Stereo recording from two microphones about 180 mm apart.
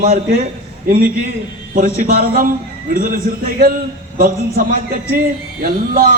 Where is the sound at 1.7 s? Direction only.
50° right (ahead or behind).